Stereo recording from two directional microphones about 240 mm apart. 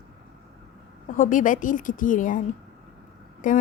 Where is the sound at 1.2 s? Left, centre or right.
Left.